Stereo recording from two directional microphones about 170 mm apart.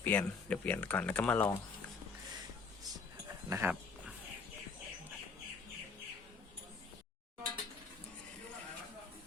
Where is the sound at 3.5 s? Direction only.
15° right (ahead or behind).